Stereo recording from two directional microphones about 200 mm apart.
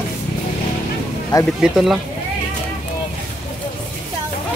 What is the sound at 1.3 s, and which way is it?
Speech, 20° left (ahead or behind).